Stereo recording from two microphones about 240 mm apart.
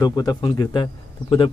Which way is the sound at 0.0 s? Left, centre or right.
Centre.